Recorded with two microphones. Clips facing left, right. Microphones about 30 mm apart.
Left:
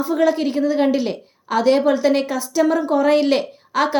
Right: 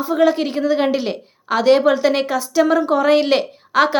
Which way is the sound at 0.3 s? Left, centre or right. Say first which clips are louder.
Right 1 dB; right.